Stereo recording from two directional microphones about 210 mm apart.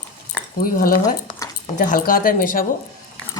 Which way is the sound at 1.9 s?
40° left (ahead or behind).